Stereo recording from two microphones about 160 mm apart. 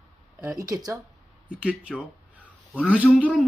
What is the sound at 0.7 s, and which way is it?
Speech, 25° right (ahead or behind).